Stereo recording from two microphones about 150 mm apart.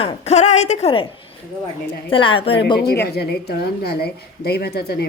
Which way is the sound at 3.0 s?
90° left.